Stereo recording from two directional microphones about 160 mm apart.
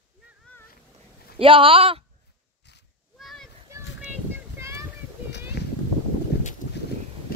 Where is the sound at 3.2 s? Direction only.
Centre (ahead or behind).